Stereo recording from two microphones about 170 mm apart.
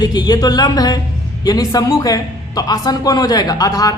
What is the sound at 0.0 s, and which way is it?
A man's voice, 25° left (ahead or behind).